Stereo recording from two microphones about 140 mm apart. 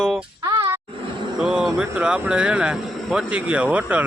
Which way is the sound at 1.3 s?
5° right (ahead or behind).